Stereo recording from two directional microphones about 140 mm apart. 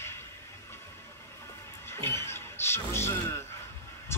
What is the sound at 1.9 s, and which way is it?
Music, 15° left (ahead or behind).